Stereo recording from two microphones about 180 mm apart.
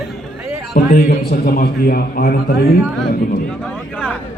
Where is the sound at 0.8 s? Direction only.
55° left (ahead or behind).